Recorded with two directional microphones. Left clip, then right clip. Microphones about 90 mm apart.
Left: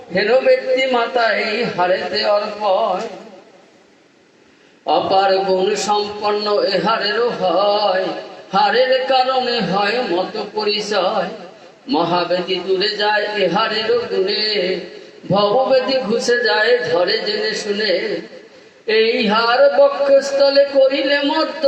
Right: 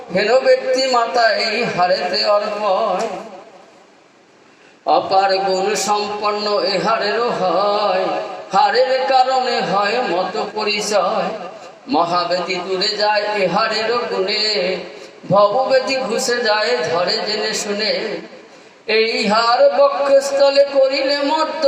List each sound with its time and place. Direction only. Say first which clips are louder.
0.1 s a man's voice: even; 30° left (ahead or behind)
4.9 s a man's voice: even; 35° left (ahead or behind)